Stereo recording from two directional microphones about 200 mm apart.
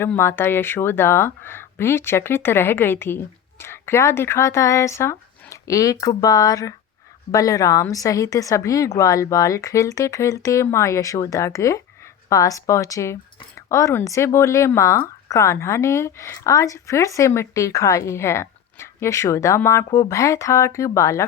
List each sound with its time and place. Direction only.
0.0 s speech: 10° left (ahead or behind)